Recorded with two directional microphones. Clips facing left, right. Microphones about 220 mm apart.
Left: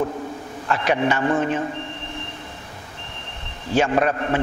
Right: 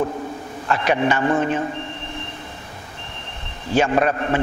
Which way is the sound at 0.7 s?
15° right (ahead or behind).